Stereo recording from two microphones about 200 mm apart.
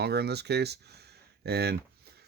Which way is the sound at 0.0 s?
55° right (ahead or behind).